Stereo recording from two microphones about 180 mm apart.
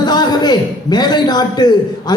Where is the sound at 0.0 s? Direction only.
25° left (ahead or behind).